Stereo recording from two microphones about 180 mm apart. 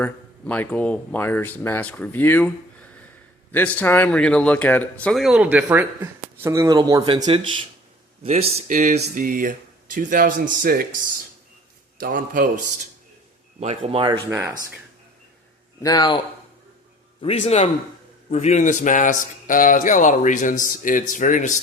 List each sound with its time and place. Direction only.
0.0 s speech: 10° left (ahead or behind); by 10.8 s 55° right (ahead or behind)
11.9 s speech: 50° right (ahead or behind)
13.6 s speech: 35° right (ahead or behind)
14.3 s speech: 15° right (ahead or behind)
15.8 s speech: 20° left (ahead or behind)
17.2 s a man's voice: 35° left (ahead or behind)